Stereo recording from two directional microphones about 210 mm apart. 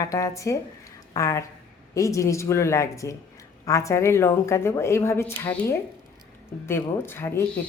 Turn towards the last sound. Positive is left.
turn(degrees=10)  # may be behind; listen again after turning